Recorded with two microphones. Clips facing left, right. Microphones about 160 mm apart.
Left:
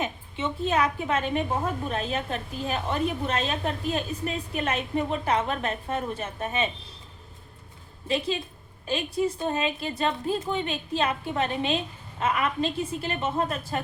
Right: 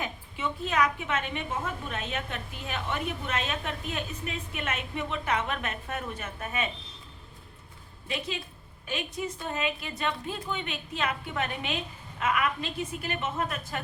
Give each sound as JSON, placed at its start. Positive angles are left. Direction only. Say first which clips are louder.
{"t": 0.0, "sound": "a woman's voice", "louder": "left 4 dB", "side_deg": 25}
{"t": 8.0, "sound": "a woman's voice", "louder": "left 7 dB", "side_deg": 30}